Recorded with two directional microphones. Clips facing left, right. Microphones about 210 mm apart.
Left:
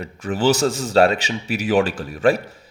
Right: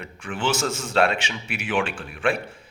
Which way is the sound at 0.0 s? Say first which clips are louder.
Left 8 dB; 40° left (ahead or behind).